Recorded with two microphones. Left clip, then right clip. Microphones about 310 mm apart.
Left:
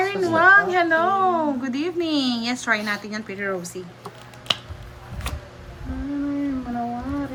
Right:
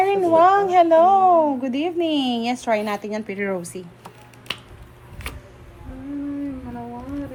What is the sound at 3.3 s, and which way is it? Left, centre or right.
Speech, centre.